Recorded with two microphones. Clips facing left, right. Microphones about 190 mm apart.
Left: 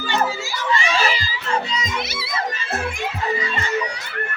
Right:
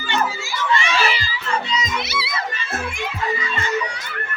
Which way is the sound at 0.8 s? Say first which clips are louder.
Even; 35° left (ahead or behind).